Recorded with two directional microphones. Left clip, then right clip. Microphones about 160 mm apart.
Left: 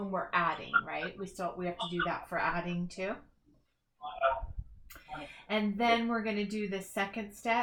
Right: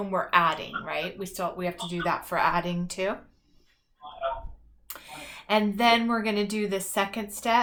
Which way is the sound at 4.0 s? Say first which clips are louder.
Left 1 dB; 30° left (ahead or behind).